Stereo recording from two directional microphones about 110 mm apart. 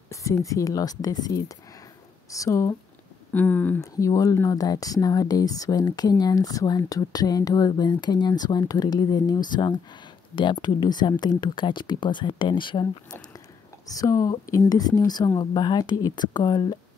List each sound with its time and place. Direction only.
0.1 s speech: 30° left (ahead or behind)
3.3 s speech: 15° left (ahead or behind)
3.8 s speech: 30° left (ahead or behind); by 13.2 s 45° left (ahead or behind)
13.8 s speech: 30° left (ahead or behind)